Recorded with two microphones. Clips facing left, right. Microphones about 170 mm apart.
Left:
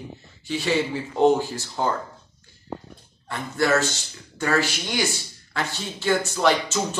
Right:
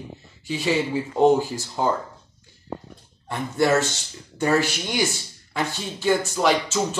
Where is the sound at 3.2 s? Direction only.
20° right (ahead or behind).